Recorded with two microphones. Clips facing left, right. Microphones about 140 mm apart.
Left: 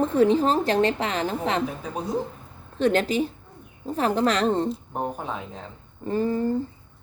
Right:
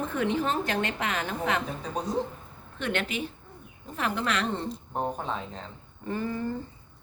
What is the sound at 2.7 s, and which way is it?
A woman's voice, 35° left (ahead or behind).